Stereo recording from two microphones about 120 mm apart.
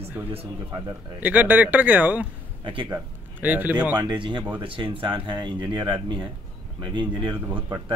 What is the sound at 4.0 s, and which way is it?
Speech, 40° right (ahead or behind).